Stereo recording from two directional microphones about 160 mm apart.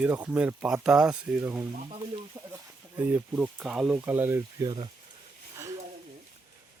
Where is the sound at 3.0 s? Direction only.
10° right (ahead or behind).